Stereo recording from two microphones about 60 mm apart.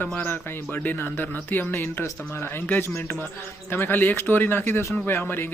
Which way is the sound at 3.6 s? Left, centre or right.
Left.